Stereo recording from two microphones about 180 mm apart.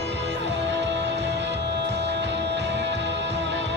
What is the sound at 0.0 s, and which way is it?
Music, 75° right (ahead or behind).